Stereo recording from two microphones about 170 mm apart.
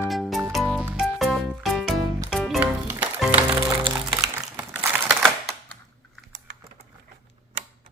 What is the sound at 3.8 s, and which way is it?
Music, 20° right (ahead or behind).